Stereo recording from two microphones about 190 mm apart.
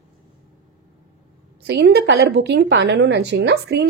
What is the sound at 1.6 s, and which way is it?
A woman's voice, 65° right (ahead or behind).